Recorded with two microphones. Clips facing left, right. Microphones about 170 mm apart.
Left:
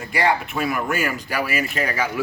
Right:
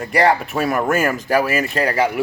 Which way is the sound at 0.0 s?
40° right (ahead or behind).